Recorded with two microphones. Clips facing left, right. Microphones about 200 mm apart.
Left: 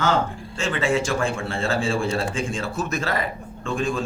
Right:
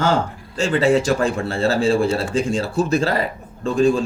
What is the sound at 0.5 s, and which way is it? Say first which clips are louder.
A man's voice: right 7 dB; 35° right (ahead or behind).